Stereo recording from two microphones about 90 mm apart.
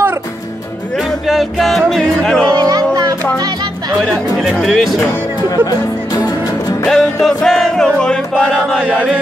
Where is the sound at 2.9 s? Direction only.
45° right (ahead or behind).